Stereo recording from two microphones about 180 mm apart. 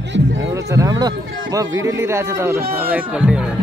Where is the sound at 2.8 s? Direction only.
10° right (ahead or behind).